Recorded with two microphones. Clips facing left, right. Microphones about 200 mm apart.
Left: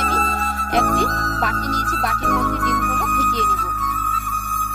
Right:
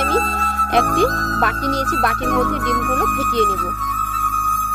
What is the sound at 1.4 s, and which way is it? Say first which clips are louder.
Music: right 5 dB; 70° right (ahead or behind).